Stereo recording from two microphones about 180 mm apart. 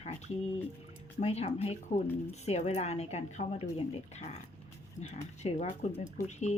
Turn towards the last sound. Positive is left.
turn(degrees=40)  # may be behind; listen again after turning